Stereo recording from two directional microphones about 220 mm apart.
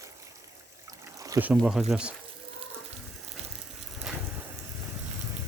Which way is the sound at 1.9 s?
5° right (ahead or behind).